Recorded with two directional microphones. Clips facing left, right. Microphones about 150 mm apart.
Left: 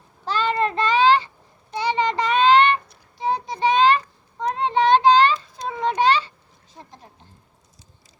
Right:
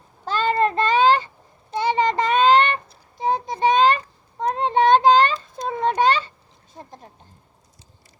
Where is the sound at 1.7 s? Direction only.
50° right (ahead or behind).